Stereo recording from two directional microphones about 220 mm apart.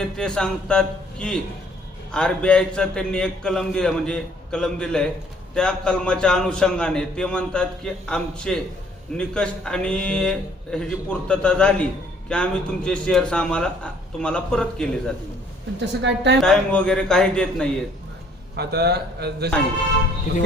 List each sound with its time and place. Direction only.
0.0 s a man's voice: 5° left (ahead or behind)
15.8 s a man's voice: 50° right (ahead or behind)
16.4 s a man's voice: 5° left (ahead or behind)
18.5 s a man's voice: 45° right (ahead or behind)